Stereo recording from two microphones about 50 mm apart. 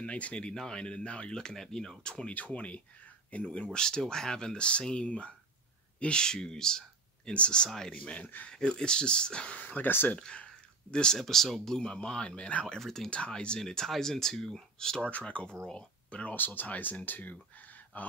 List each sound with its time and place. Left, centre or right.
0.0 s speech: left
2.3 s speech: left
8.5 s speech: centre
9.6 s speech: left
10.1 s a sound: left
11.1 s speech: centre
11.8 s speech: centre
12.7 s speech: centre
13.1 s speech: left
15.0 s speech: left
16.3 s speech: left